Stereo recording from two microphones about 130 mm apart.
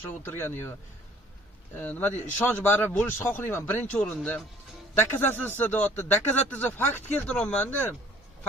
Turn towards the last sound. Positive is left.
turn(degrees=10)  # may be behind; listen again after turning